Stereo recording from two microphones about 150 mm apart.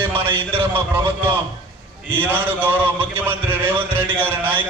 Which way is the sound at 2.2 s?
10° right (ahead or behind).